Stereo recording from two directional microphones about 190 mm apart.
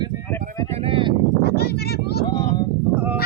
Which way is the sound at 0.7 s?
30° right (ahead or behind).